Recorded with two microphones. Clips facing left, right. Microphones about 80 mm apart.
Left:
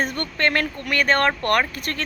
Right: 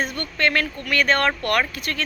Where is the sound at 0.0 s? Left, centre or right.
Left.